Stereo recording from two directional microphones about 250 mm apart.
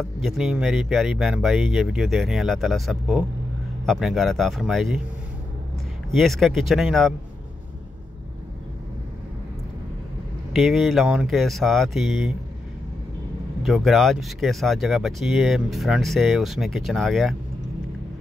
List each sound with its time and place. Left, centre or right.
0.0 s speech: centre
6.1 s speech: centre
10.5 s speech: centre
13.6 s speech: centre